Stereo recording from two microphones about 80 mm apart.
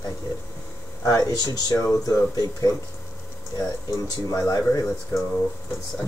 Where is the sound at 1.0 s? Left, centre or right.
Left.